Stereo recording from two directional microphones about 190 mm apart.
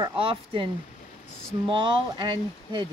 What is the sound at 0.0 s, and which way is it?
Speech, 30° right (ahead or behind).